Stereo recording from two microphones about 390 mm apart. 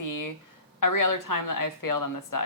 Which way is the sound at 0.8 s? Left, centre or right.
Left.